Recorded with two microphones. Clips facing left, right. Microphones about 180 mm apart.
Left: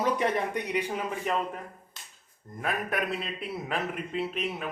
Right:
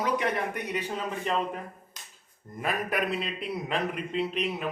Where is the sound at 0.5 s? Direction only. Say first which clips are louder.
Left 2 dB; 15° left (ahead or behind).